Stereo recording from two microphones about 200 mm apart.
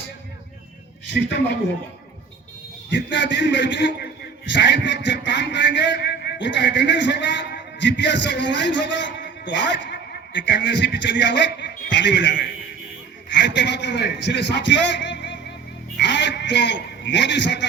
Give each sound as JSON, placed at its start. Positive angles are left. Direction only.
{"t": 1.0, "sound": "a man's voice", "side_deg": 60}
{"t": 2.9, "sound": "a man's voice", "side_deg": 65}